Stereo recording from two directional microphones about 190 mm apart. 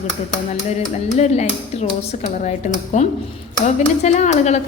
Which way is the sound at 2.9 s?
40° left (ahead or behind).